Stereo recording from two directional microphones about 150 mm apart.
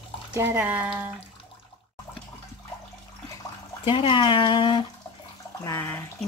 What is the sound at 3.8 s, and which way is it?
Speech, 35° left (ahead or behind).